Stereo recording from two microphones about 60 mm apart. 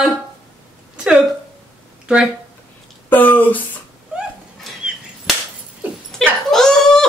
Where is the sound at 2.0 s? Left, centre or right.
Centre.